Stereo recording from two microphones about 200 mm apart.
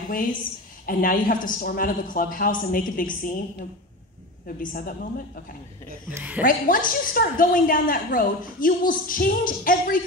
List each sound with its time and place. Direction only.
0.1 s a woman's voice: 45° left (ahead or behind)
4.6 s a woman's voice: 45° left (ahead or behind)
6.1 s a woman's voice: 10° right (ahead or behind)
6.4 s a woman's voice: 45° left (ahead or behind)